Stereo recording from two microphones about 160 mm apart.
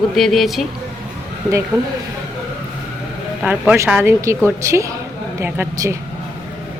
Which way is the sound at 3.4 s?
10° right (ahead or behind).